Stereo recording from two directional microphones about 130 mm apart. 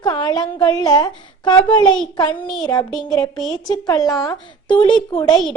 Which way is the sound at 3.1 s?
30° left (ahead or behind).